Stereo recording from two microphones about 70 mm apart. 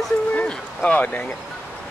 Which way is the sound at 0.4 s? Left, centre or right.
Centre.